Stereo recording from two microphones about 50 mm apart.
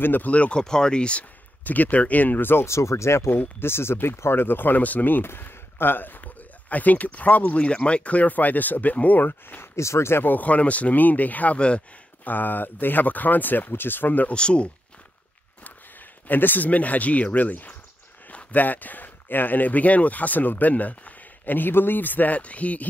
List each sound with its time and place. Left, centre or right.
0.0 s speech: left
0.3 s speech: left
1.6 s speech: left
2.6 s speech: left
3.3 s speech: left
7.5 s speech: left
9.8 s speech: left
10.2 s speech: left
12.3 s speech: left
14.3 s speech: left
15.6 s speech: left